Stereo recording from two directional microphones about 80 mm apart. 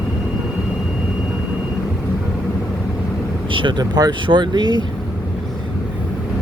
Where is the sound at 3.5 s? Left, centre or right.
Right.